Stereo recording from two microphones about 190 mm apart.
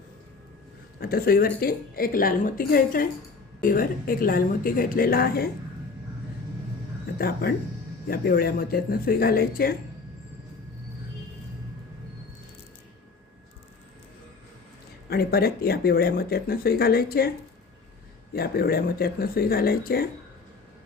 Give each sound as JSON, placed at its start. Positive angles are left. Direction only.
{"t": 0.9, "sound": "speech", "side_deg": 50}
{"t": 7.2, "sound": "speech", "side_deg": 50}
{"t": 15.1, "sound": "speech", "side_deg": 55}
{"t": 18.3, "sound": "speech", "side_deg": 55}